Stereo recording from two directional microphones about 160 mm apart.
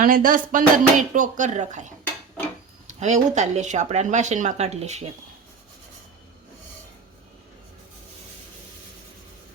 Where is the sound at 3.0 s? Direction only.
50° right (ahead or behind).